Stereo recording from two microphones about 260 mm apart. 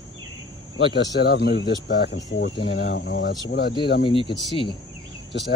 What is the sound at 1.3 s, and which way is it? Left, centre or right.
Speech, left.